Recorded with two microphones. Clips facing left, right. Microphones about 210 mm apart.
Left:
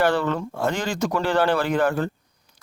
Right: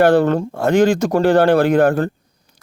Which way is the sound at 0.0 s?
55° right (ahead or behind).